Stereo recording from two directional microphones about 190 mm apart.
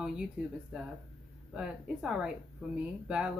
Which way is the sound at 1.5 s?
5° right (ahead or behind).